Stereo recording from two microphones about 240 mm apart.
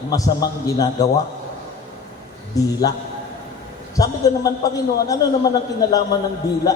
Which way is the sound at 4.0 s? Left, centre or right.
Centre.